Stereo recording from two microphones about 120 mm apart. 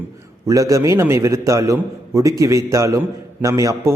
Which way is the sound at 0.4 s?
25° right (ahead or behind).